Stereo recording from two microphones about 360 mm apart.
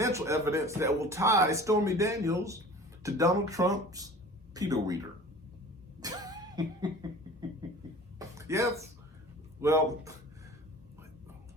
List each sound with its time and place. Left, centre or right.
0.0 s speech: centre
6.0 s cough: centre
8.2 s a sound: centre
9.6 s speech: centre